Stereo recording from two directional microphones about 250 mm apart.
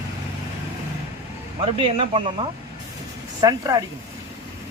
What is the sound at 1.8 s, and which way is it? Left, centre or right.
Speech, right.